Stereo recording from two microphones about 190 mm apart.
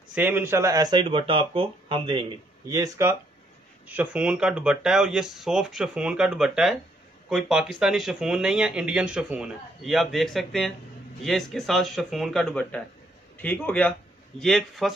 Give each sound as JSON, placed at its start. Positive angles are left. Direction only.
{"t": 0.1, "sound": "speech", "side_deg": -10}
{"t": 2.7, "sound": "a man's voice", "side_deg": -15}